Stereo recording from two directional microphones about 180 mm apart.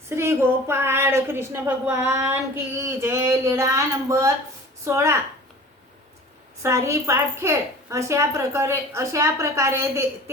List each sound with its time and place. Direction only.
0.1 s speech: 15° right (ahead or behind)
6.6 s speech: 15° right (ahead or behind)